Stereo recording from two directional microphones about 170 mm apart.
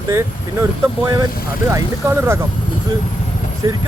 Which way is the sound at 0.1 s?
20° right (ahead or behind).